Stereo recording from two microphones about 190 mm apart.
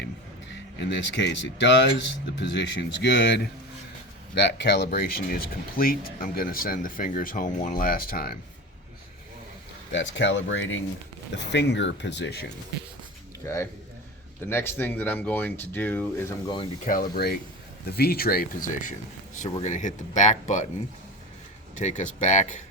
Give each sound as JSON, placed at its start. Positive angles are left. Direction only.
{"t": 0.5, "sound": "speech", "side_deg": 70}
{"t": 4.4, "sound": "speech", "side_deg": 65}
{"t": 9.9, "sound": "speech", "side_deg": 70}
{"t": 11.3, "sound": "speech", "side_deg": 65}
{"t": 13.4, "sound": "speech", "side_deg": 15}
{"t": 16.8, "sound": "speech", "side_deg": 45}
{"t": 21.8, "sound": "speech", "side_deg": 40}